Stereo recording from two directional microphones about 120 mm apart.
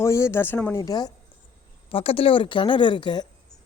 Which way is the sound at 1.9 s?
50° left (ahead or behind).